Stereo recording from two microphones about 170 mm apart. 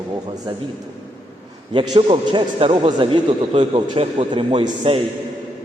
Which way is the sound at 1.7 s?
30° right (ahead or behind).